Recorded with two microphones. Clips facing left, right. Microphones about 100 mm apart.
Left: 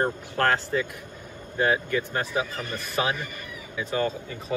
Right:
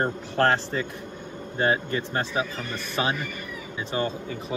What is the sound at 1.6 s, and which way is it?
Speech, 30° right (ahead or behind).